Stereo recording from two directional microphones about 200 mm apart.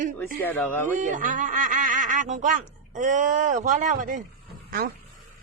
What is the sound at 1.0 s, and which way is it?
Speech, 40° right (ahead or behind).